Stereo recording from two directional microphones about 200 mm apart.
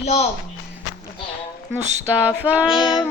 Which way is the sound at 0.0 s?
30° left (ahead or behind).